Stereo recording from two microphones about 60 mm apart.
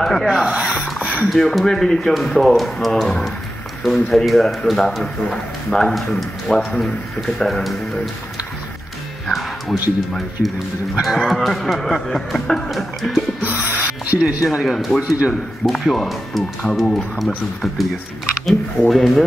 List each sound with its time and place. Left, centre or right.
0.0 s music: centre
1.3 s music: centre
5.3 s speech: centre
6.7 s music: centre
9.3 s speech: centre
11.0 s music: centre
14.5 s music: centre
15.0 s speech: centre
15.6 s music: centre
18.4 s music: centre